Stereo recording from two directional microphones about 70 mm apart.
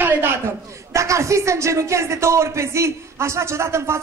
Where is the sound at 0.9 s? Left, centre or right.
Right.